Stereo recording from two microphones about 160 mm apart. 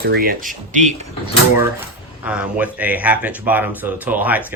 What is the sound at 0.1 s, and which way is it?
Speech, 65° right (ahead or behind).